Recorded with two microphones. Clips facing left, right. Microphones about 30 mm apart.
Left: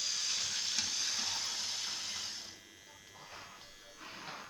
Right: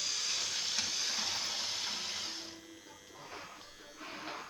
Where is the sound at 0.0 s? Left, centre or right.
Centre.